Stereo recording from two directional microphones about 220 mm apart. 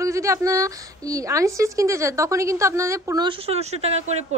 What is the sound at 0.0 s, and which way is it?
A woman's voice, 15° right (ahead or behind).